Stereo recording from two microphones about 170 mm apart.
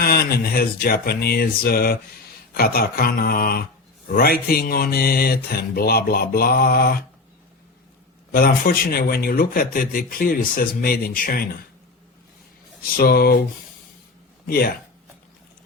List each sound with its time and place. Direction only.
0.0 s speech: 65° left (ahead or behind)
8.3 s speech: 60° left (ahead or behind)
13.0 s speech: 65° left (ahead or behind)
14.4 s speech: 60° left (ahead or behind)